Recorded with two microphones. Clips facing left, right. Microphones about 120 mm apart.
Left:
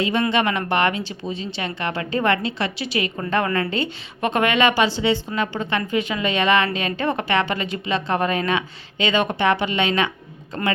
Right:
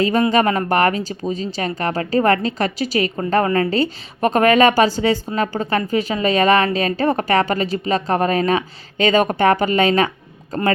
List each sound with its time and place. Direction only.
0.0 s speech: 40° right (ahead or behind)